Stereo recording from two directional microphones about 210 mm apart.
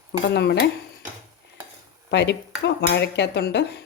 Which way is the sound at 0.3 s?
55° left (ahead or behind).